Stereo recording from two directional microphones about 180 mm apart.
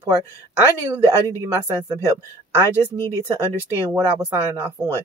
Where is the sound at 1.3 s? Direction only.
15° right (ahead or behind).